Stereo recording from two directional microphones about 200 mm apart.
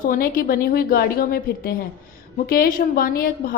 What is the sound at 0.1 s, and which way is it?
A woman's voice, 45° left (ahead or behind).